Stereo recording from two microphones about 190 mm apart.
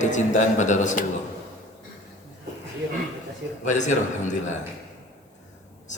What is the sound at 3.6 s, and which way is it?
Speech, 40° left (ahead or behind).